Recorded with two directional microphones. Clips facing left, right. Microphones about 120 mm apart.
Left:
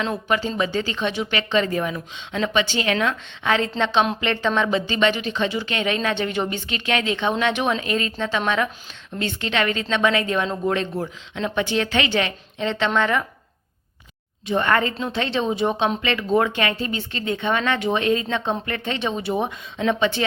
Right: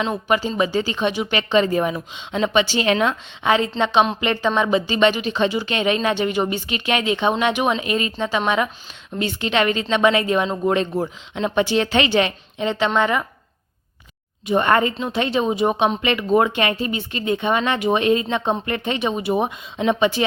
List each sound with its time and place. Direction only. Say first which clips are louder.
0.3 s a woman's voice: right 4 dB; 10° right (ahead or behind)
14.5 s a woman's voice: right 3 dB; 20° right (ahead or behind)